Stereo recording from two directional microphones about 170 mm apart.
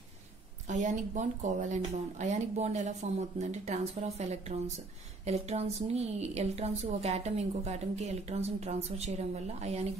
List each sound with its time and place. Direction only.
0.7 s a woman's voice: 45° right (ahead or behind)